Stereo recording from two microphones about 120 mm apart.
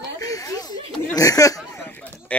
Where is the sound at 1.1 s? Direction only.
30° left (ahead or behind).